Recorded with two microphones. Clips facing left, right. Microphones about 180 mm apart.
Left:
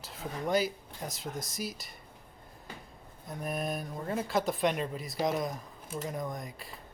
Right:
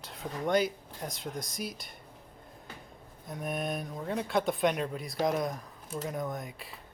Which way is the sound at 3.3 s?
Centre (ahead or behind).